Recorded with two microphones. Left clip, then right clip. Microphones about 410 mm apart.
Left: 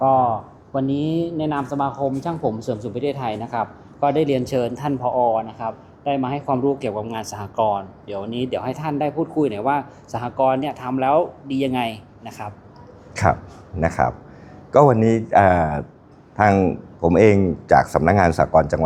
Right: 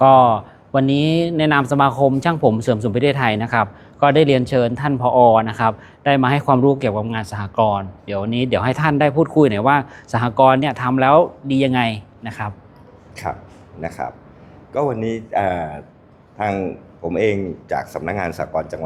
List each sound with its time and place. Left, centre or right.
0.0 s speech: right
13.2 s speech: left